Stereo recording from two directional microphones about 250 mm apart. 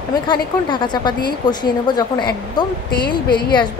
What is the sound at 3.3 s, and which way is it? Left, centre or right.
Speech, left.